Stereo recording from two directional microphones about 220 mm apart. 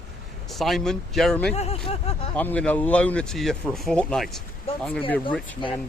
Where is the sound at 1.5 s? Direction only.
30° left (ahead or behind).